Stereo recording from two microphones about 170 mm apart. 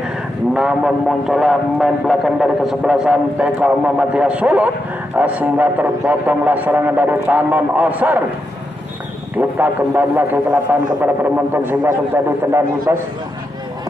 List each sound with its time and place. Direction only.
0.6 s speech: 5° right (ahead or behind)
9.4 s speech: 10° right (ahead or behind)